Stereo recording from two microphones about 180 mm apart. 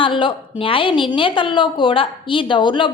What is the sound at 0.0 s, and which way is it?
A woman's voice, 25° left (ahead or behind).